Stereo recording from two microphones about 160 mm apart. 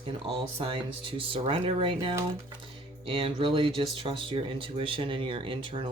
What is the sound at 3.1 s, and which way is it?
Speech, 35° right (ahead or behind).